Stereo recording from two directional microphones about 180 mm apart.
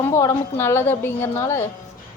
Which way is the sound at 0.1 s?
15° left (ahead or behind).